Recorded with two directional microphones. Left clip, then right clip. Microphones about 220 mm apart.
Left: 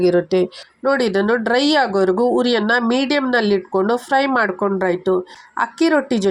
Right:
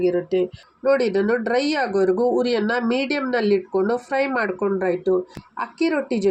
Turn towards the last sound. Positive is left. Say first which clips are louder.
# left 6 dB
turn(degrees=20)  # may be behind; listen again after turning